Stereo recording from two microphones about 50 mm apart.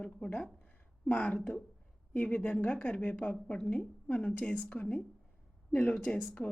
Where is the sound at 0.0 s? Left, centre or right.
Centre.